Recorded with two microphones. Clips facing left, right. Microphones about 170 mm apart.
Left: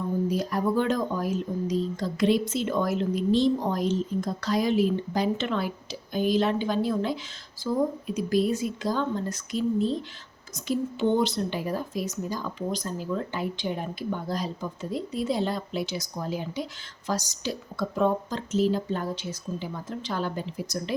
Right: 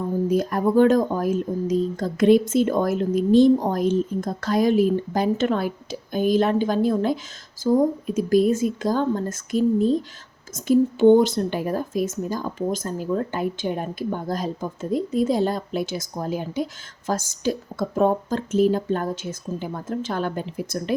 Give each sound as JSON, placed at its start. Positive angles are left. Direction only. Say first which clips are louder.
{"t": 0.3, "sound": "speech", "louder": "right 5 dB", "side_deg": -50}